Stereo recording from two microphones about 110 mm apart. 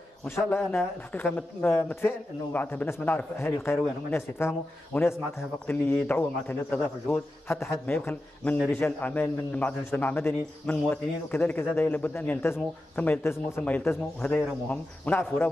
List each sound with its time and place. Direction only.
0.7 s a man's voice: 15° left (ahead or behind)